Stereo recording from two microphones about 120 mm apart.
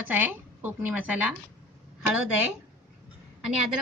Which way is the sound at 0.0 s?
15° right (ahead or behind).